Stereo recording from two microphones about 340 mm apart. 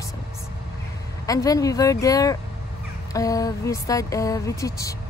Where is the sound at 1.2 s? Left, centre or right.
Centre.